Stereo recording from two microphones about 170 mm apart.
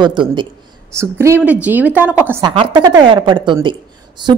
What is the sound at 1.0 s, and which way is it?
A woman's voice, 15° right (ahead or behind).